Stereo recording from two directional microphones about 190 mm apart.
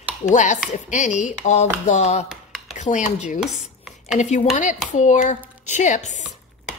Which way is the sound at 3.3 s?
Centre (ahead or behind).